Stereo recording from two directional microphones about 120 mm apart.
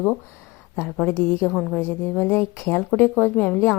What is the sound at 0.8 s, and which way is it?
A woman's voice, 15° left (ahead or behind).